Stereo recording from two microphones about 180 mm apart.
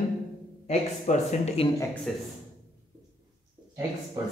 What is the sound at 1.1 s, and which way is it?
Speech, 40° left (ahead or behind).